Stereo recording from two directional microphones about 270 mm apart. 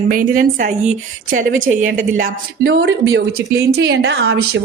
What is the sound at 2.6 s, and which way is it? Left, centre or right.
A woman's voice, right.